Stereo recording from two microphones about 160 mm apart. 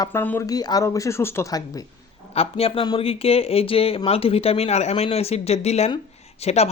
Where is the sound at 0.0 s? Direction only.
15° left (ahead or behind).